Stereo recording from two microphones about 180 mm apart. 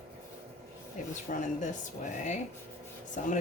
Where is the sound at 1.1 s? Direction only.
45° left (ahead or behind).